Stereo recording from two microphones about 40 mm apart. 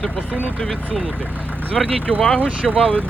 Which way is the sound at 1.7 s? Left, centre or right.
Left.